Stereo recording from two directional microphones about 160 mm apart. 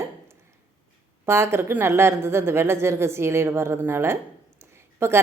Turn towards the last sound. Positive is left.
turn(degrees=-15)  # may be behind; listen again after turning